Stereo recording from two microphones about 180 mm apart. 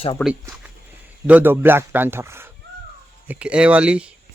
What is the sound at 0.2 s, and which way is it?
Speech, 10° left (ahead or behind).